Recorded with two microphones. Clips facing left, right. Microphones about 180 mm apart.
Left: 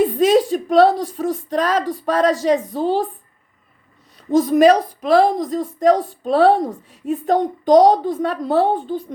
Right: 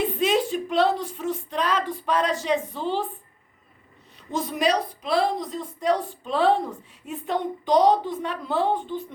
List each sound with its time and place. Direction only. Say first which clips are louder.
0.0 s speech: left 8 dB; 40° left (ahead or behind)
4.3 s a woman's voice: left 11 dB; 45° left (ahead or behind)